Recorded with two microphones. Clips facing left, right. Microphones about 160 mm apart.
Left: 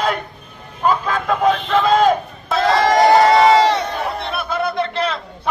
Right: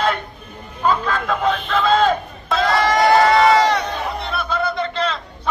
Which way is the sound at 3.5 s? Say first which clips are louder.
Left 2 dB; 30° left (ahead or behind).